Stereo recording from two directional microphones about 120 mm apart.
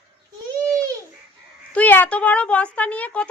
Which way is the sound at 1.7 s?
15° left (ahead or behind).